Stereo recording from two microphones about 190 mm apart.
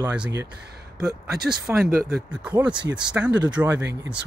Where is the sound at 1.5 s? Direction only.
5° right (ahead or behind).